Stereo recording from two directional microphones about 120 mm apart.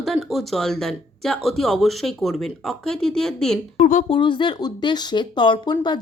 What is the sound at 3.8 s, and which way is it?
Speech, 90° left.